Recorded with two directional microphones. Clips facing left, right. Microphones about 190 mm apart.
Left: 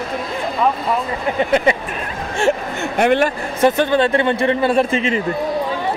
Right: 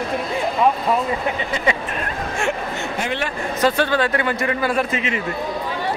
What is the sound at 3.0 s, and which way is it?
Speech, 60° left (ahead or behind).